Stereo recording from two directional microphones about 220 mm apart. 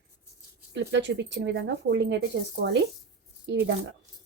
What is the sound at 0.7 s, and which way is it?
Speech, 55° right (ahead or behind).